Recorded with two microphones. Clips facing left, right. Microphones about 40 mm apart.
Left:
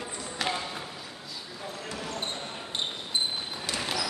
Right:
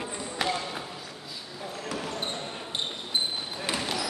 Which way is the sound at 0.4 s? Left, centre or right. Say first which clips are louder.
Right 2 dB; centre.